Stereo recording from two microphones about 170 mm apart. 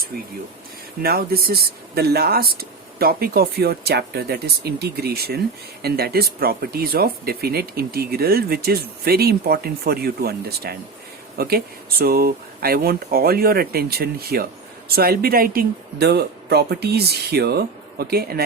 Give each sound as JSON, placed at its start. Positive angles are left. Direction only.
{"t": 1.0, "sound": "speech", "side_deg": -65}